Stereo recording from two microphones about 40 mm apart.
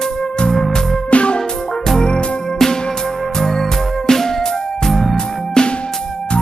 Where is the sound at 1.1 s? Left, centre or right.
Left.